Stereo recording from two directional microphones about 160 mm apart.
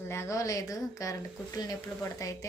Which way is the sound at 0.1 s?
15° left (ahead or behind).